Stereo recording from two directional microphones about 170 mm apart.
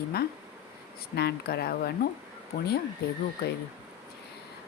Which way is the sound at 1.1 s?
70° left (ahead or behind).